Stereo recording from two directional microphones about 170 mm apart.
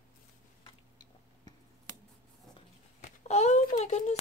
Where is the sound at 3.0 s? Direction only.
40° left (ahead or behind).